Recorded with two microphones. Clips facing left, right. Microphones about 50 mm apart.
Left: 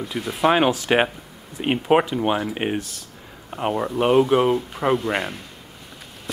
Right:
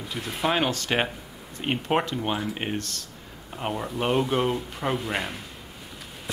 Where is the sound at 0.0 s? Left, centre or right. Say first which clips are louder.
Left 7 dB; centre.